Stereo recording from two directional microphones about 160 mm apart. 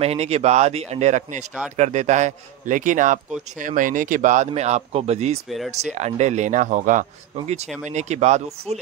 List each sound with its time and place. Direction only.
0.0 s a man's voice: 40° right (ahead or behind)